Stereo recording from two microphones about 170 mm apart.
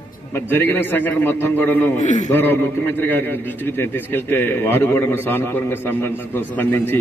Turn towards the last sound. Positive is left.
turn(degrees=10)  # may be behind; listen again after turning